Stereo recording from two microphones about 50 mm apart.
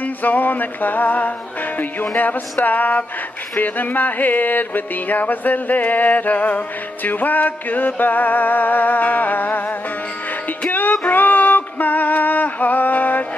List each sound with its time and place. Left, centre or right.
0.0 s music: left